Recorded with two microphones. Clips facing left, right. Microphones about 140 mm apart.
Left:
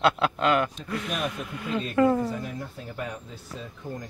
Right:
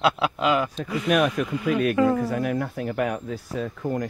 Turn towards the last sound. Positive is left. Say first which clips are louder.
# right 10 dB
turn(degrees=-75)  # may be behind; listen again after turning